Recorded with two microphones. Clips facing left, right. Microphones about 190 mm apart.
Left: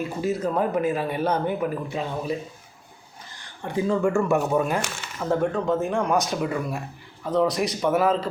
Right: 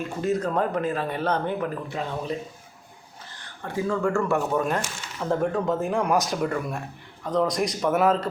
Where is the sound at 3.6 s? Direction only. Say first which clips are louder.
Left 3 dB; 15° left (ahead or behind).